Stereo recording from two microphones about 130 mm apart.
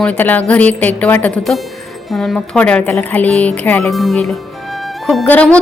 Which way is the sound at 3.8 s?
Centre (ahead or behind).